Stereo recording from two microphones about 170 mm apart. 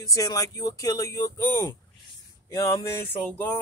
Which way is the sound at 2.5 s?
20° left (ahead or behind).